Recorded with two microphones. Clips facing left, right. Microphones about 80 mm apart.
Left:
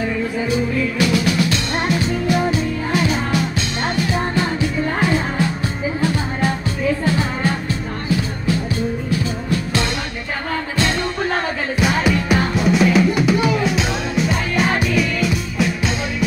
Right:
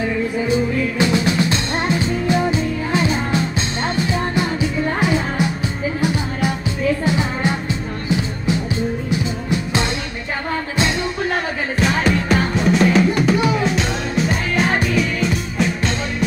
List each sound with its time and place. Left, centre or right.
0.5 s music: right
9.1 s music: right
11.8 s music: centre